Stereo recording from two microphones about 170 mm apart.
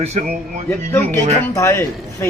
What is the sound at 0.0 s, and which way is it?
Speech, 40° right (ahead or behind).